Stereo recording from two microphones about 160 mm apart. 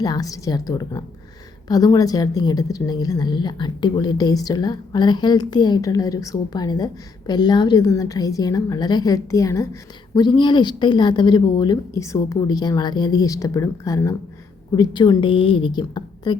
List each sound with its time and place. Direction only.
0.0 s a woman's voice: 25° left (ahead or behind)